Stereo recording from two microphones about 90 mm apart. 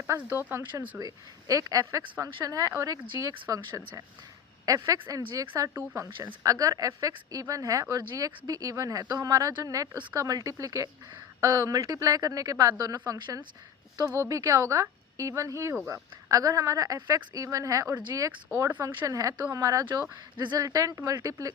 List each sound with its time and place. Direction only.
0.1 s speech: 30° right (ahead or behind)
18.7 s speech: 20° right (ahead or behind)
19.0 s speech: 40° right (ahead or behind)